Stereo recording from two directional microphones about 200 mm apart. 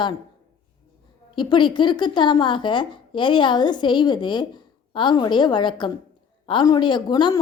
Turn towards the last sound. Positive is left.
turn(degrees=20)  # may be behind; listen again after turning